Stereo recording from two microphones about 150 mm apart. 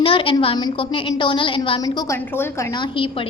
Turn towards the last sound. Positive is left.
turn(degrees=35)  # may be behind; listen again after turning